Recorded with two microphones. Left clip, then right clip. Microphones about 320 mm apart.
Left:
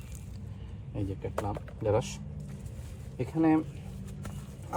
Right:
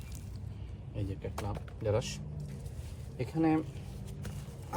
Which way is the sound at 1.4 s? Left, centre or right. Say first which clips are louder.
Left 4 dB; centre.